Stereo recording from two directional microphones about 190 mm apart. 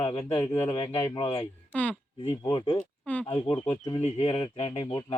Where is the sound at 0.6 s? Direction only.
30° left (ahead or behind).